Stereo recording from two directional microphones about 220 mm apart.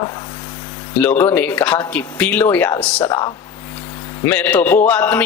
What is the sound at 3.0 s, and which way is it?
Speech, 20° left (ahead or behind).